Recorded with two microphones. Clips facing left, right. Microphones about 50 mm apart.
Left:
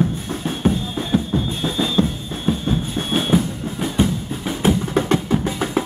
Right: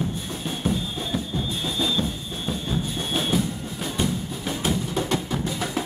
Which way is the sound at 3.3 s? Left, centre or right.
Left.